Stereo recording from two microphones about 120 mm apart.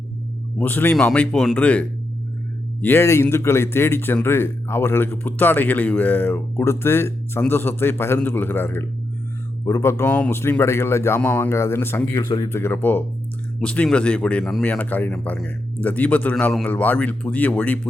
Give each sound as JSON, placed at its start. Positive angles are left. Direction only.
{"t": 0.6, "sound": "speech", "side_deg": 15}
{"t": 2.8, "sound": "a man's voice", "side_deg": 20}
{"t": 16.6, "sound": "speech", "side_deg": 15}